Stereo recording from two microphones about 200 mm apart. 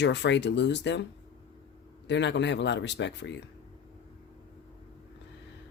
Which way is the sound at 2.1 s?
60° left (ahead or behind).